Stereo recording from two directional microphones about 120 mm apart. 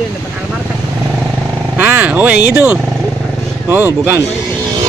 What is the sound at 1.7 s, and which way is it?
Speech, 15° right (ahead or behind).